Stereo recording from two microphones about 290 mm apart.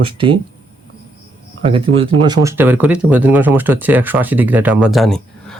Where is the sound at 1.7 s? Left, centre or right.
Centre.